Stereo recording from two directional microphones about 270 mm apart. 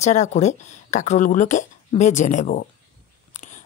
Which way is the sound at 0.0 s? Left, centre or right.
Left.